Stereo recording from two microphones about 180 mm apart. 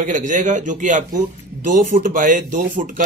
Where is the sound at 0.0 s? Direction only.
45° right (ahead or behind).